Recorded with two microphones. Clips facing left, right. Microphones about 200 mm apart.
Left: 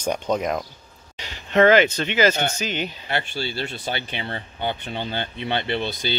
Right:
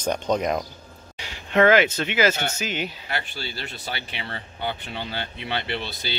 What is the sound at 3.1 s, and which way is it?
Speech, 25° left (ahead or behind).